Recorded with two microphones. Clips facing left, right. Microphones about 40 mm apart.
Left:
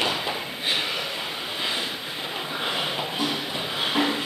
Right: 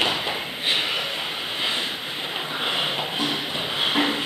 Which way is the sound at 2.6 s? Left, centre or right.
Right.